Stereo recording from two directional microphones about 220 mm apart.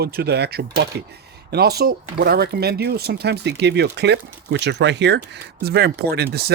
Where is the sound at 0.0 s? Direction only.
45° right (ahead or behind).